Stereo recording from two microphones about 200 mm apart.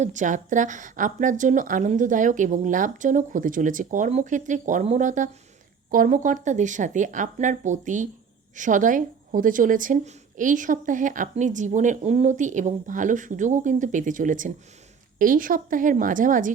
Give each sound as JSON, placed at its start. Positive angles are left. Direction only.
{"t": 0.0, "sound": "a woman's voice", "side_deg": -40}